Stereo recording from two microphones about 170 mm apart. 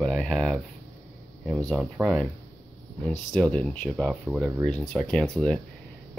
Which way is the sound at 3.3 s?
5° left (ahead or behind).